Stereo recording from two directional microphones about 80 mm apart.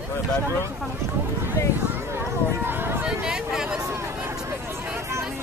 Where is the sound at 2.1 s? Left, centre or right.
Right.